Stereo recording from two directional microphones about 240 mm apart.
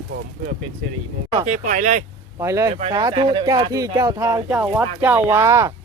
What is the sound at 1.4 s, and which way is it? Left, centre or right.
Speech, right.